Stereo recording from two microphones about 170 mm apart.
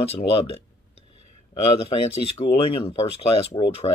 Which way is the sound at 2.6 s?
35° left (ahead or behind).